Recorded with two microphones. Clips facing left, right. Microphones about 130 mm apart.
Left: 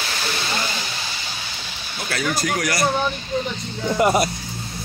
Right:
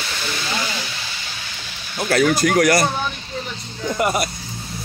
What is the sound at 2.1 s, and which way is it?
Speech, 55° right (ahead or behind).